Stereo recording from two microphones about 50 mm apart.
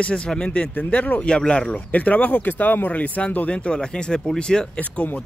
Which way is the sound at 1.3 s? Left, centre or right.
Centre.